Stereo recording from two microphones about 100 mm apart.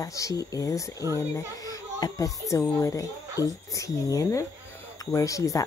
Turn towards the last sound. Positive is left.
turn(degrees=35)  # may be behind; listen again after turning